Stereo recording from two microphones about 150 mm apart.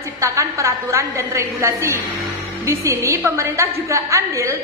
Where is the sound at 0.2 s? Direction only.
20° right (ahead or behind).